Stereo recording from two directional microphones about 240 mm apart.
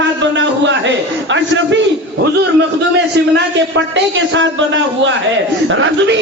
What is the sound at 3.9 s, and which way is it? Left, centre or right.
A woman's voice, right.